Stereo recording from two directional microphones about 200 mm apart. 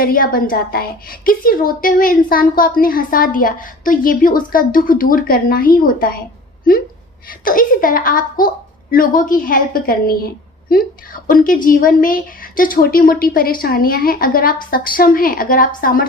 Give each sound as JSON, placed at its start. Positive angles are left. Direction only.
{"t": 0.0, "sound": "a woman's voice", "side_deg": 45}
{"t": 7.4, "sound": "a woman's voice", "side_deg": 45}